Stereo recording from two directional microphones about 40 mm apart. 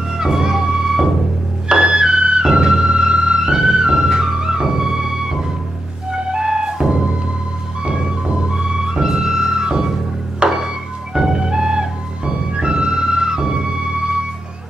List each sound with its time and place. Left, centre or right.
0.1 s music: centre
10.4 s music: right